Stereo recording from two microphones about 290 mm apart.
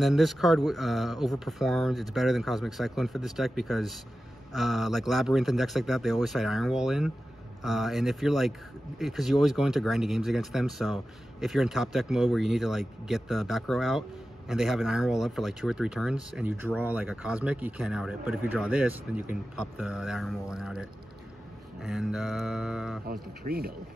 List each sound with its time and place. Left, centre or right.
0.0 s speech: centre
23.4 s speech: right